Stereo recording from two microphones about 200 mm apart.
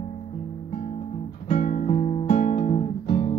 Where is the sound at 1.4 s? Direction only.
35° left (ahead or behind).